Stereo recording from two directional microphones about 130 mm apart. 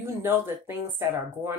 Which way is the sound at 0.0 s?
15° right (ahead or behind).